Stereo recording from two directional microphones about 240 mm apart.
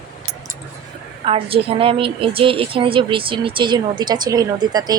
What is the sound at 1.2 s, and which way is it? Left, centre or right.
A woman's voice, right.